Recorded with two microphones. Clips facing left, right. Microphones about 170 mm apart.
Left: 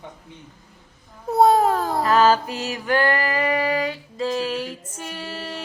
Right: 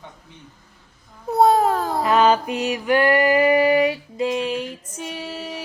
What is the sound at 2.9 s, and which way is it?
Female singing, 20° right (ahead or behind).